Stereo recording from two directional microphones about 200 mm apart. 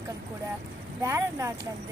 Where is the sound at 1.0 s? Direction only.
15° right (ahead or behind).